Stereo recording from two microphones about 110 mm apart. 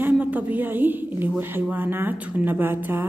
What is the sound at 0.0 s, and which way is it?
A woman's voice, 15° right (ahead or behind).